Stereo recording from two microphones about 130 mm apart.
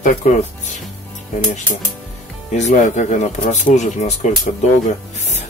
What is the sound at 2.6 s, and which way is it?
Speech, 65° left (ahead or behind).